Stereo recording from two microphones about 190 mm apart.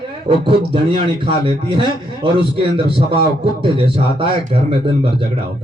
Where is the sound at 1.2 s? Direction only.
25° right (ahead or behind).